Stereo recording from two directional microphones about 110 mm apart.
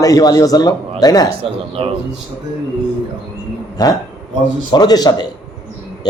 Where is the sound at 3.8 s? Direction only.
40° left (ahead or behind).